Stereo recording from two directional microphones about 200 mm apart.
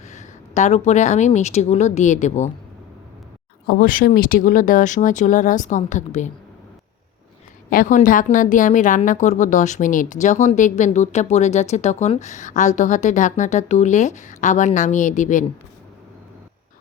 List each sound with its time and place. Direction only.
0.1 s a woman's voice: 35° left (ahead or behind)
3.7 s a woman's voice: 45° left (ahead or behind)
7.7 s a woman's voice: 40° left (ahead or behind)